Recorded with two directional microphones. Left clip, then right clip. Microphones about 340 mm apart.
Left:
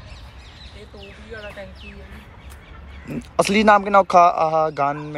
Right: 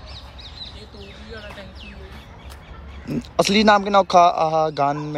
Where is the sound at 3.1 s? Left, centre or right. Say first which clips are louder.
Even; centre.